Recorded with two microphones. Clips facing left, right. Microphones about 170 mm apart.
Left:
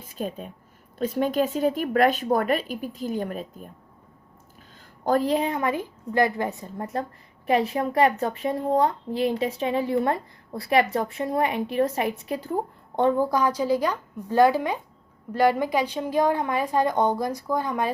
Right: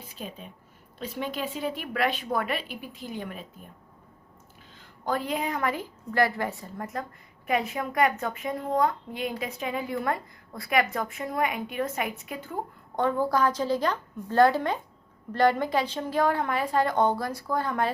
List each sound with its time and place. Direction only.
0.0 s speech: 50° left (ahead or behind)
5.0 s a woman's voice: 40° left (ahead or behind)
13.0 s a woman's voice: 15° left (ahead or behind)